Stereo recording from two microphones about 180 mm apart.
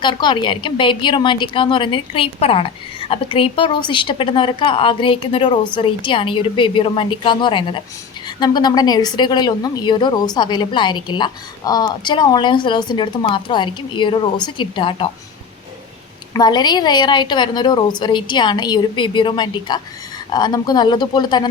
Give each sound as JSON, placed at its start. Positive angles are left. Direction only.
{"t": 0.0, "sound": "a woman's voice", "side_deg": 25}
{"t": 16.3, "sound": "a woman's voice", "side_deg": 25}